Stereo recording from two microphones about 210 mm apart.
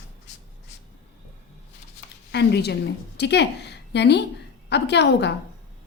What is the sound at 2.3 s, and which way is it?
A woman's voice, 55° left (ahead or behind).